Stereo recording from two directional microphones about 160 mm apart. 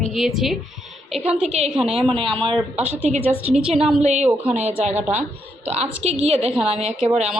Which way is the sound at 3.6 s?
35° right (ahead or behind).